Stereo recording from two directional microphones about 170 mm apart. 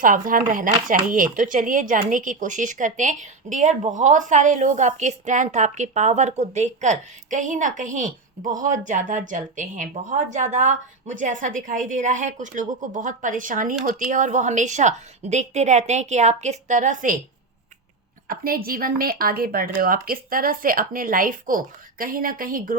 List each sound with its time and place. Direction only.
0.0 s a woman's voice: 55° right (ahead or behind)
18.3 s a woman's voice: 60° right (ahead or behind)